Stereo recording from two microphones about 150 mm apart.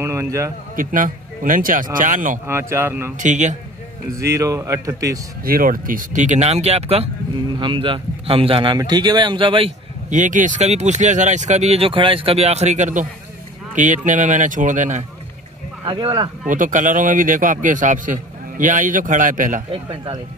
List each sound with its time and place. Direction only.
0.0 s a man's voice: 20° right (ahead or behind)
0.7 s a man's voice: 65° right (ahead or behind)
2.4 s a man's voice: 15° right (ahead or behind)
3.2 s a man's voice: 55° right (ahead or behind)
4.2 s speech: 20° right (ahead or behind)
5.4 s a man's voice: 75° right (ahead or behind); by 9.8 s 35° right (ahead or behind)
10.0 s a man's voice: 55° right (ahead or behind)
15.8 s a man's voice: 35° right (ahead or behind)
16.4 s a man's voice: 60° right (ahead or behind)
19.7 s a man's voice: 35° right (ahead or behind)